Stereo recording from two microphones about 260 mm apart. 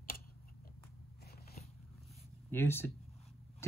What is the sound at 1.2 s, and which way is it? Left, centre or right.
Biting, left.